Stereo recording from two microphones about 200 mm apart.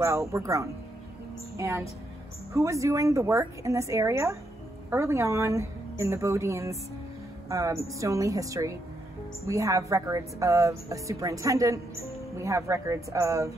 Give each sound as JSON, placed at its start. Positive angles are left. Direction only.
{"t": 0.3, "sound": "a woman's voice", "side_deg": -15}